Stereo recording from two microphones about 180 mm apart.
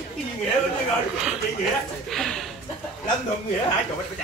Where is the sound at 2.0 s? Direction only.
Centre (ahead or behind).